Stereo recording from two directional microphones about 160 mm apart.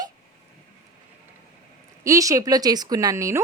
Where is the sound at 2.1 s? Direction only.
20° right (ahead or behind).